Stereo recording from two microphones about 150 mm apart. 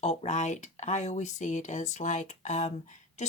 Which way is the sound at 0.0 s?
50° left (ahead or behind).